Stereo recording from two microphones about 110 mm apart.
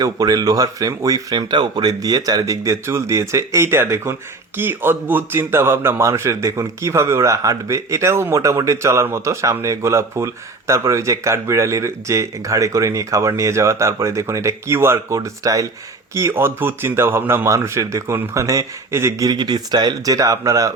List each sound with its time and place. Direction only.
0.0 s a man's voice: 35° right (ahead or behind)